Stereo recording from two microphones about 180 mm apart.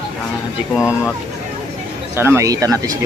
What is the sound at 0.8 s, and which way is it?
Speech, 5° right (ahead or behind).